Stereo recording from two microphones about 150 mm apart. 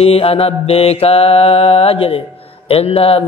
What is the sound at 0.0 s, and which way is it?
Speech, 40° left (ahead or behind).